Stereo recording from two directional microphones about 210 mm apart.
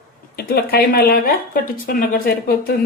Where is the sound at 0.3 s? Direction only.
50° left (ahead or behind).